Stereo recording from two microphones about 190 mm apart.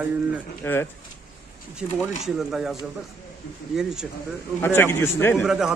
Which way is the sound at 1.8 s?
5° right (ahead or behind).